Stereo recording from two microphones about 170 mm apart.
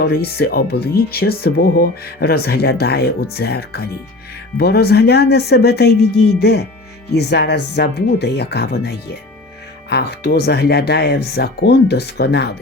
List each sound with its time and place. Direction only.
0.0 s speech: 65° left (ahead or behind)